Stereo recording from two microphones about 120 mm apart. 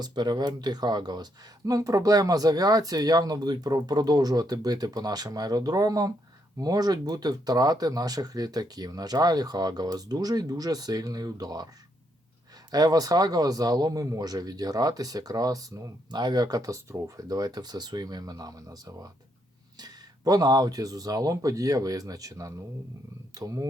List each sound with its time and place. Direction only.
0.0 s a man's voice: 35° right (ahead or behind)
12.7 s a man's voice: 30° right (ahead or behind)